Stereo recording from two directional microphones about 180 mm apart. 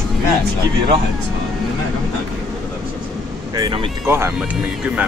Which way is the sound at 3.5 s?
20° right (ahead or behind).